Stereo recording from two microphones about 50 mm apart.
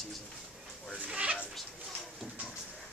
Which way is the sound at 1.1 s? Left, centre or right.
Right.